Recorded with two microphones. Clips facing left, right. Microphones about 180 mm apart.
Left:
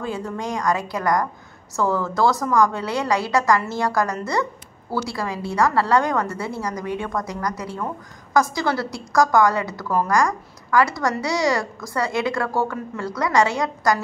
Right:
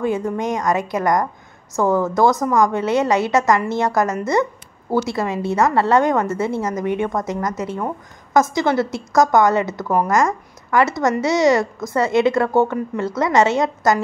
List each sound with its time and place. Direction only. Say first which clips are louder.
0.0 s a woman's voice: right 7 dB; 20° right (ahead or behind)